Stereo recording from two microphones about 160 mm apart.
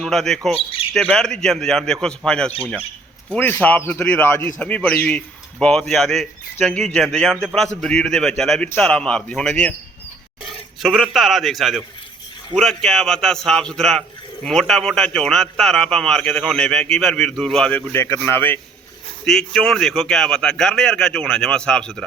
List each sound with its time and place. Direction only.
0.0 s speech: 5° left (ahead or behind)
10.8 s speech: centre (ahead or behind)